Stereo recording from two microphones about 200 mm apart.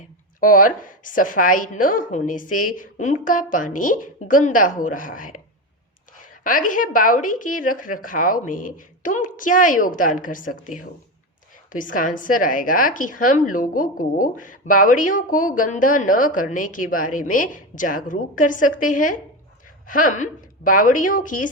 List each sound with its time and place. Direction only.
0.3 s a woman's voice: 45° left (ahead or behind)
6.4 s a woman's voice: 40° left (ahead or behind)